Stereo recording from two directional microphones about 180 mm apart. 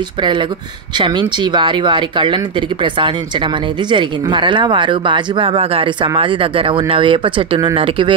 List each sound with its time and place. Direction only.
0.2 s speech: 25° right (ahead or behind)